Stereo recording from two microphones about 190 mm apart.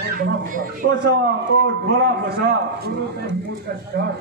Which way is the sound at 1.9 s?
60° right (ahead or behind).